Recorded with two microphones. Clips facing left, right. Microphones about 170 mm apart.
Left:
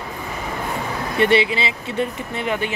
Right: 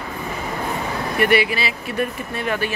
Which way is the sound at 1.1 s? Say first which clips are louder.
Left 1 dB; 25° left (ahead or behind).